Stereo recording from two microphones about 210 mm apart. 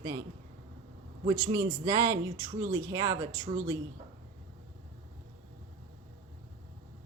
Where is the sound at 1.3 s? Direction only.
25° right (ahead or behind).